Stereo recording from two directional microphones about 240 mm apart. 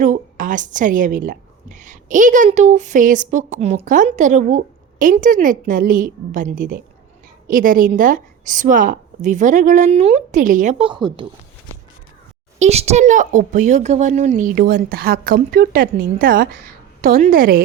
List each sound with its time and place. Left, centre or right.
0.0 s a child's voice: right
12.5 s a child's voice: right